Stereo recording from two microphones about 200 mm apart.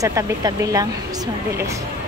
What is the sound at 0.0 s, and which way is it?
Speech, 15° right (ahead or behind).